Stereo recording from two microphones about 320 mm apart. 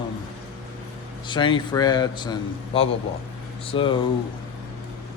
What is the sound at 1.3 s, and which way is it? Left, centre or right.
A man's voice, centre.